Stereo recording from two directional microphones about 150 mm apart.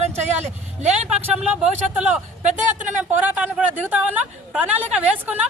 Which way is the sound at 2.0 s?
55° right (ahead or behind).